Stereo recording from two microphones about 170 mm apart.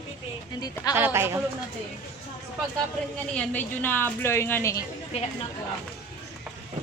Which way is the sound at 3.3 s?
10° left (ahead or behind).